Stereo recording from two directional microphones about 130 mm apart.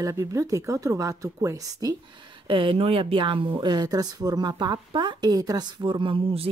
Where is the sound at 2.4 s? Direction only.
40° right (ahead or behind).